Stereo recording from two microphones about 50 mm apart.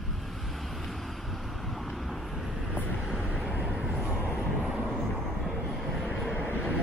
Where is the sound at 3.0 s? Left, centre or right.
Centre.